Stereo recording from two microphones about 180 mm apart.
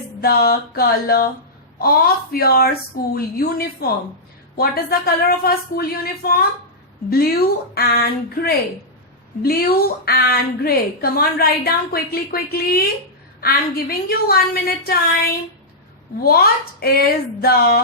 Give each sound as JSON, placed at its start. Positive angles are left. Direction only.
{"t": 0.2, "sound": "a woman's voice", "side_deg": 55}
{"t": 16.2, "sound": "a woman's voice", "side_deg": 60}